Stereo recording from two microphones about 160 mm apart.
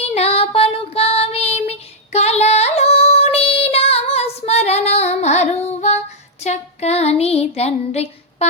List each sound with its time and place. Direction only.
0.1 s child singing: 40° left (ahead or behind)